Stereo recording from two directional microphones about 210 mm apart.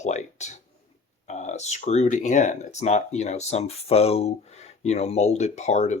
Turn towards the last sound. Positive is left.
turn(degrees=35)  # may be behind; listen again after turning